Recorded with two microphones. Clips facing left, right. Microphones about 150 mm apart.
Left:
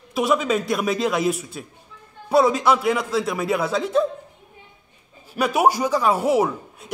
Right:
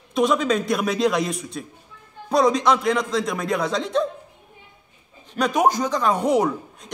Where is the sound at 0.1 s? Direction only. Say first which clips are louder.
Right 1 dB; 5° left (ahead or behind).